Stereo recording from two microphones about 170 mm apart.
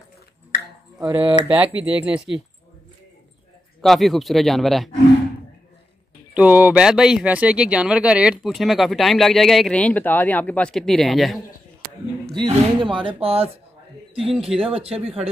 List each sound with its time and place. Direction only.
1.1 s speech: 10° right (ahead or behind)
3.8 s speech: centre (ahead or behind)
6.3 s speech: 10° right (ahead or behind)
12.4 s speech: 30° right (ahead or behind)
14.3 s speech: centre (ahead or behind)
14.6 s speech: 35° right (ahead or behind)